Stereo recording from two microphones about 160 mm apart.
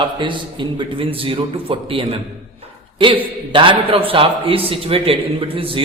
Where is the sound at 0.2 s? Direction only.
30° right (ahead or behind).